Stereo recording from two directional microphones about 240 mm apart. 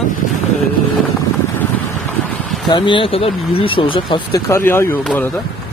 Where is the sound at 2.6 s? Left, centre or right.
Centre.